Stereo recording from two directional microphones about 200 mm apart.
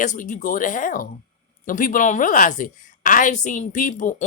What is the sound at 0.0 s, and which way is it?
A woman's voice, 40° left (ahead or behind).